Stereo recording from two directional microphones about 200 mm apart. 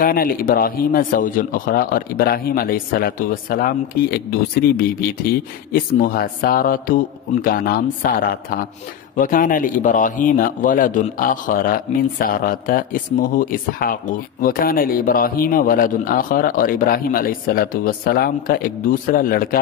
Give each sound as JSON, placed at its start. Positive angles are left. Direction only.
{"t": 0.0, "sound": "speech", "side_deg": 45}